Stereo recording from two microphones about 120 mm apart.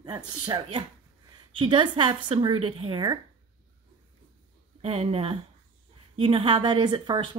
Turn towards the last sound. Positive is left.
turn(degrees=-40)  # may be behind; listen again after turning